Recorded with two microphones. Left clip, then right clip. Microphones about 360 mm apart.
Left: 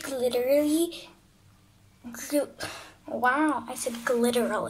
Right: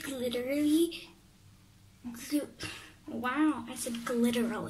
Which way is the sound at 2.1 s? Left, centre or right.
Centre.